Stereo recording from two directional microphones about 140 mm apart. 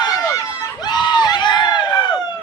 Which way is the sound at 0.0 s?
25° left (ahead or behind).